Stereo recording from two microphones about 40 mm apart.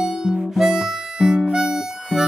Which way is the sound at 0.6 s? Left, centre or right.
Centre.